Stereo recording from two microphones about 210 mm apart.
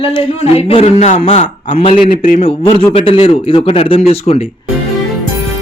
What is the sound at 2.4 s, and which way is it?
Speech, 25° left (ahead or behind).